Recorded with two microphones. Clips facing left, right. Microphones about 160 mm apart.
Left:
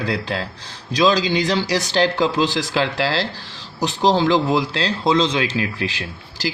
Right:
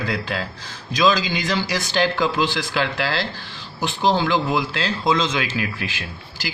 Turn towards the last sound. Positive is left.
turn(degrees=30)  # may be behind; listen again after turning